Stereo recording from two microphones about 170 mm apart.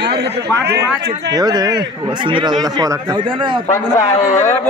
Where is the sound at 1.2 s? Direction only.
25° right (ahead or behind).